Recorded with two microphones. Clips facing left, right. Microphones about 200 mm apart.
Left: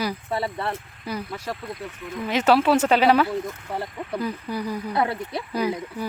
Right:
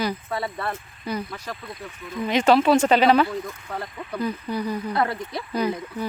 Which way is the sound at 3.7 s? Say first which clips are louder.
Left 2 dB; 30° left (ahead or behind).